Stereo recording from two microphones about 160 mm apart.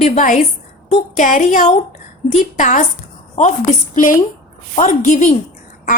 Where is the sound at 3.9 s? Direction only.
55° left (ahead or behind).